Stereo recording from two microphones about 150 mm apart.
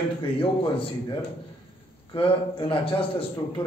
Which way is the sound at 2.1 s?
35° left (ahead or behind).